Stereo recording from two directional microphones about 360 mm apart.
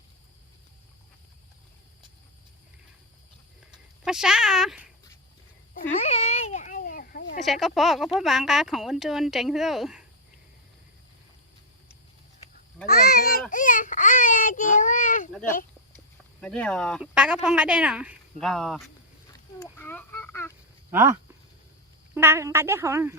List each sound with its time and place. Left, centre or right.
4.0 s speech: centre
5.9 s baby cry: centre
7.4 s speech: centre
12.8 s honk: left
13.5 s baby cry: left
15.3 s speech: centre
19.3 s a sound: centre
20.9 s speech: centre